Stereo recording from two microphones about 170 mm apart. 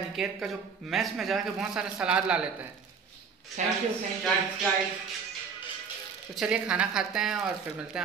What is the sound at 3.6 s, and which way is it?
Speech, 45° right (ahead or behind).